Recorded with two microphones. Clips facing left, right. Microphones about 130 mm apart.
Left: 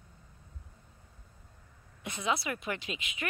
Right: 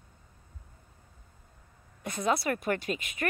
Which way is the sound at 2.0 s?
45° right (ahead or behind).